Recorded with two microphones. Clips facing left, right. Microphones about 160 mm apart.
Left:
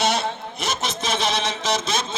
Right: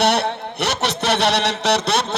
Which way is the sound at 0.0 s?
65° right (ahead or behind).